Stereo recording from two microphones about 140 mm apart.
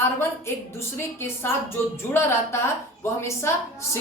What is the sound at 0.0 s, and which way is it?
A woman's voice, 20° left (ahead or behind).